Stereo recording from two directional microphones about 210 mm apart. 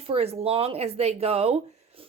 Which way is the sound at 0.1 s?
30° right (ahead or behind).